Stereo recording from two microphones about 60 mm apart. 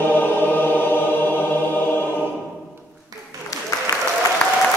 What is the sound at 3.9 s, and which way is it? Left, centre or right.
Applause, left.